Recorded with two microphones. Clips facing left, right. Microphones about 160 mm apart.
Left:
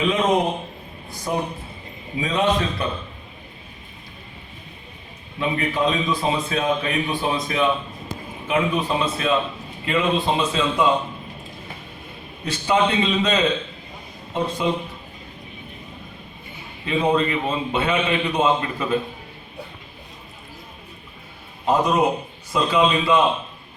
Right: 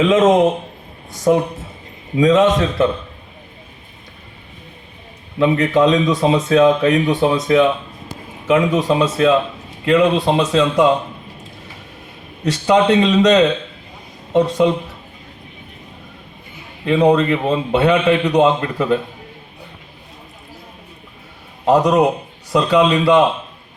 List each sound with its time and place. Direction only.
0.0 s a man's voice: 90° right
5.4 s a man's voice: 90° right
9.8 s speech: 80° right
12.5 s speech: 75° right (ahead or behind)
16.8 s a man's voice: 75° right (ahead or behind)
21.7 s a man's voice: 80° right